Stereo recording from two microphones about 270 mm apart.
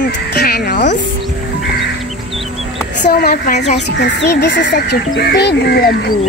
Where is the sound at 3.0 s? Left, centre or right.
Left.